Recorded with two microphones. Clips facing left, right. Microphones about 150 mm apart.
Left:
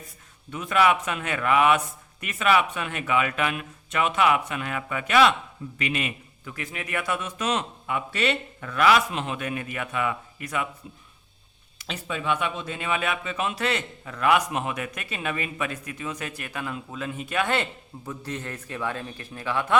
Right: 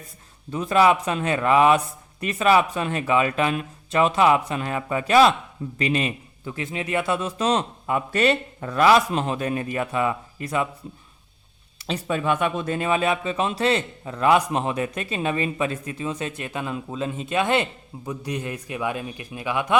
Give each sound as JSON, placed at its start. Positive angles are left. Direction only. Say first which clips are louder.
{"t": 0.5, "sound": "a man's voice", "louder": "right 4 dB", "side_deg": -30}
{"t": 11.8, "sound": "speech", "louder": "right 7 dB", "side_deg": -40}